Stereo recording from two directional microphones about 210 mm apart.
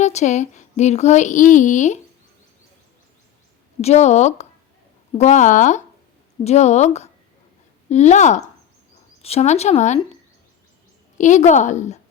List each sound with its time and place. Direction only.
0.0 s speech: 35° left (ahead or behind)
3.8 s speech: 30° left (ahead or behind)
11.2 s speech: 35° left (ahead or behind)